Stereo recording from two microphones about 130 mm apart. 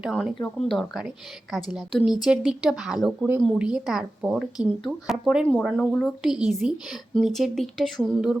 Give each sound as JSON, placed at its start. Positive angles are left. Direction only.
{"t": 0.0, "sound": "a woman's voice", "side_deg": 0}